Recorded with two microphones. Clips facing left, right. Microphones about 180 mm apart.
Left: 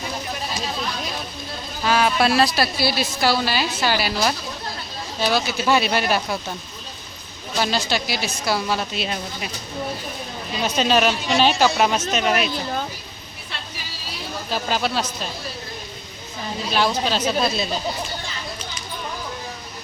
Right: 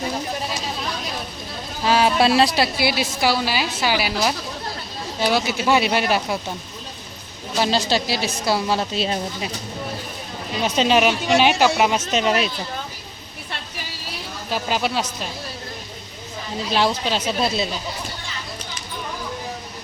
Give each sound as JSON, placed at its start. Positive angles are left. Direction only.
{"t": 1.8, "sound": "music", "side_deg": -30}
{"t": 2.6, "sound": "a woman's voice", "side_deg": -20}
{"t": 7.6, "sound": "a woman's voice", "side_deg": -30}
{"t": 10.6, "sound": "a woman's voice", "side_deg": -20}
{"t": 12.2, "sound": "a woman's voice", "side_deg": -30}
{"t": 14.5, "sound": "a woman's voice", "side_deg": -15}
{"t": 16.7, "sound": "a woman's voice", "side_deg": -25}